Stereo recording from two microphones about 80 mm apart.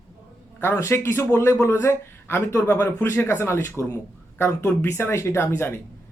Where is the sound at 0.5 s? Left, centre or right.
Left.